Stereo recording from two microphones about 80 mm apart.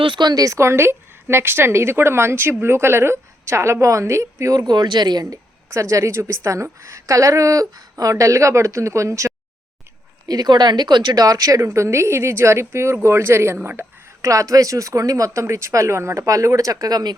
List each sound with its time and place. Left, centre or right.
0.0 s a woman's voice: right
4.6 s speech: right
5.2 s a woman's voice: right
10.2 s a woman's voice: right